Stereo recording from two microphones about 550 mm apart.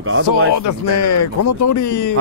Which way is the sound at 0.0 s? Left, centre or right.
Right.